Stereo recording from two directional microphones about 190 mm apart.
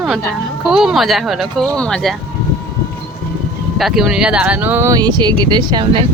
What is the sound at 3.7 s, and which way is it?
Speech, centre (ahead or behind).